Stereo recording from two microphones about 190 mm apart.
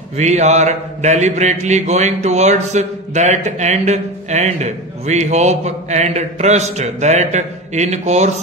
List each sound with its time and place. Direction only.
0.2 s mantra: 35° right (ahead or behind)